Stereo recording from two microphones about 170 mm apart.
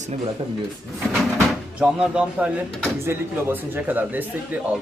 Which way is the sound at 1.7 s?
5° right (ahead or behind).